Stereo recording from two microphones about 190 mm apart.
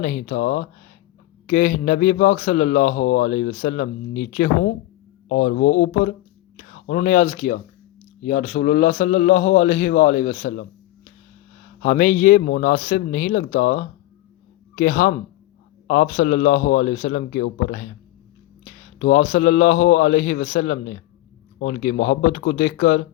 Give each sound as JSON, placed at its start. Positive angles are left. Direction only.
{"t": 0.0, "sound": "a man's voice", "side_deg": 45}